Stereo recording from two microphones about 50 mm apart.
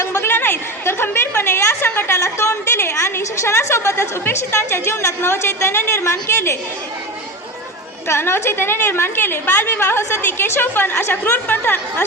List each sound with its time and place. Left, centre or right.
0.0 s a woman's voice: left
8.0 s a woman's voice: left